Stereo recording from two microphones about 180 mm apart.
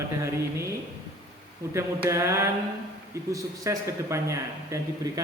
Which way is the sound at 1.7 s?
15° right (ahead or behind).